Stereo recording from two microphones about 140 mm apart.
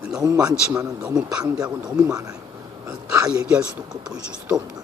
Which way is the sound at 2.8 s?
25° right (ahead or behind).